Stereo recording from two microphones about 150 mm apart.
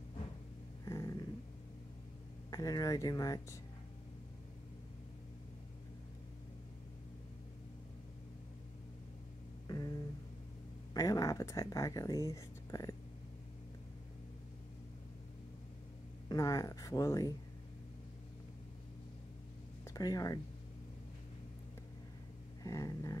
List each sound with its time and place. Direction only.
0.8 s dog: 25° left (ahead or behind)
2.5 s speech: 25° left (ahead or behind)
9.7 s a sound: 25° left (ahead or behind)
10.9 s speech: 25° left (ahead or behind)
16.3 s speech: 20° left (ahead or behind)
19.9 s speech: 25° left (ahead or behind)
22.6 s a sound: 20° left (ahead or behind)